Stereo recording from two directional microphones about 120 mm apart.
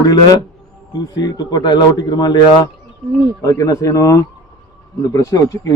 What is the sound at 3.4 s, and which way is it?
A man's voice, 30° left (ahead or behind).